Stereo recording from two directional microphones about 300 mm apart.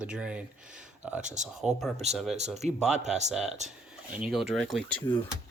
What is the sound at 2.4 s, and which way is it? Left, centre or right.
Speech, right.